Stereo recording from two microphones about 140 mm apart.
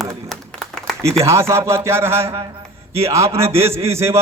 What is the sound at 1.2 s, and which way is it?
A man's voice, 20° right (ahead or behind).